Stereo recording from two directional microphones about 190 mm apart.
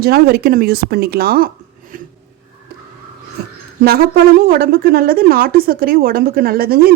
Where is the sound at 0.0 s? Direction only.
55° right (ahead or behind).